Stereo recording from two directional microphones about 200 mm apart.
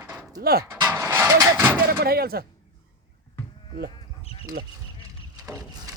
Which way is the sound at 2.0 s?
50° right (ahead or behind).